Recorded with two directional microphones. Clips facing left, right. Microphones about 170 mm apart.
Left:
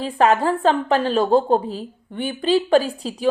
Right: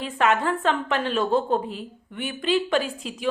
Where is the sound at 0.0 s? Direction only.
35° left (ahead or behind).